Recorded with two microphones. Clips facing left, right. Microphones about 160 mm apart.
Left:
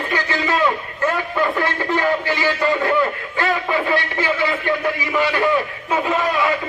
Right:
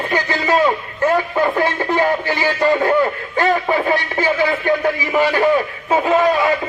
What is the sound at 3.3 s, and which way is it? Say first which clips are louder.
Music: right 4 dB; 45° right (ahead or behind).